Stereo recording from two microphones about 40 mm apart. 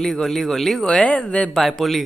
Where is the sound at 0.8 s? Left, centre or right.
Left.